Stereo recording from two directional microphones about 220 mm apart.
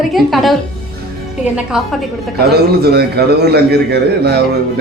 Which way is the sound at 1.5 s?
Centre (ahead or behind).